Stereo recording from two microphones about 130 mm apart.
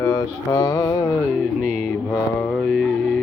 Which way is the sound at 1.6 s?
65° right (ahead or behind).